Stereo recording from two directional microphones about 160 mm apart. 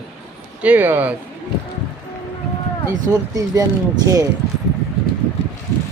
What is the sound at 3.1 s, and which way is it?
Speech, 20° right (ahead or behind).